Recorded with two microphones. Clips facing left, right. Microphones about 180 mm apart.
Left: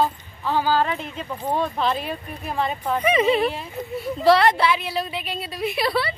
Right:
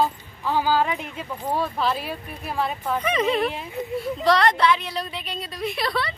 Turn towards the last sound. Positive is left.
turn(degrees=5)  # may be behind; listen again after turning